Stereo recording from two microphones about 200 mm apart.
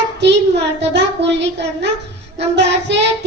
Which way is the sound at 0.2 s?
60° right (ahead or behind).